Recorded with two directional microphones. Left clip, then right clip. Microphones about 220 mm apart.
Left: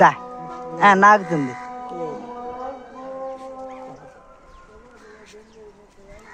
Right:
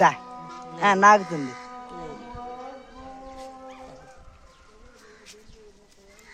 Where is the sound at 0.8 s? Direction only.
20° left (ahead or behind).